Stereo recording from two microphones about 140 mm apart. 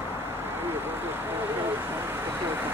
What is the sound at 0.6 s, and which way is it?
Vehicle, 15° right (ahead or behind).